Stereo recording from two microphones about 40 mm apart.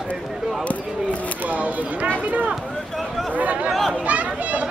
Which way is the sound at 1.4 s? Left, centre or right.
Right.